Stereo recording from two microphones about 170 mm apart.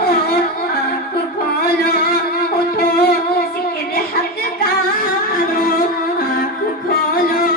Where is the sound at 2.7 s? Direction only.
65° left (ahead or behind).